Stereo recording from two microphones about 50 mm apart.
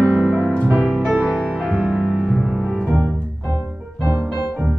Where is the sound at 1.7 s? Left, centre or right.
Centre.